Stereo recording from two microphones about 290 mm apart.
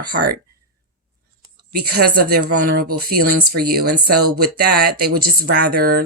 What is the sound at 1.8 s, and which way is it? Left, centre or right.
Speech, right.